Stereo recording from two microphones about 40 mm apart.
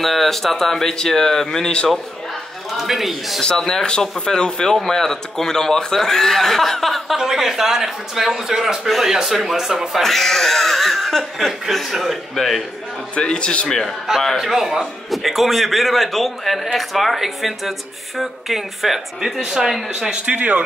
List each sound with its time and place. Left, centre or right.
0.0 s a man's voice: centre
2.8 s a man's voice: centre
3.3 s a man's voice: centre
7.2 s a man's voice: centre
8.8 s a man's voice: centre
10.0 s speech: centre
11.3 s a man's voice: centre
13.1 s a man's voice: left
14.3 s a man's voice: centre
20.2 s speech: right